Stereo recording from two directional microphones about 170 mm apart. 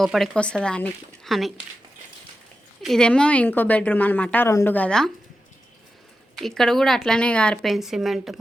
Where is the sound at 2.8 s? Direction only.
5° left (ahead or behind).